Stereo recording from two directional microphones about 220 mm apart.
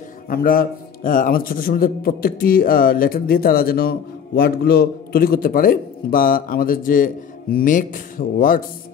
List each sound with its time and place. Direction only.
0.3 s a man's voice: 40° left (ahead or behind)